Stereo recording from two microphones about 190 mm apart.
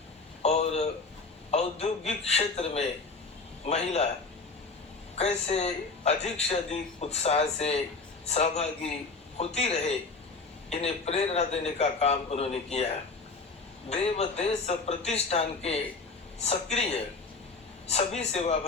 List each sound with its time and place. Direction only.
0.4 s a sound: 35° left (ahead or behind)
1.5 s a man's voice: 35° left (ahead or behind)
5.1 s a man's voice: 35° left (ahead or behind)
13.9 s a man's voice: 35° left (ahead or behind)